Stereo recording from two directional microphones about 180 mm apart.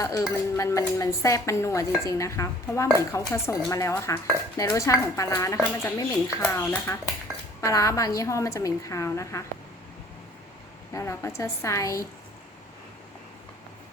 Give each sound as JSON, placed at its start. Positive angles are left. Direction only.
{"t": 0.0, "sound": "speech", "side_deg": 20}
{"t": 10.9, "sound": "speech", "side_deg": 15}